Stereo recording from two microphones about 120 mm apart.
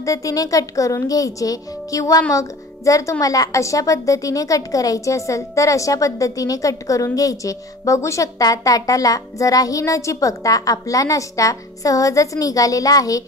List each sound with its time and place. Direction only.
0.0 s speech: 30° left (ahead or behind)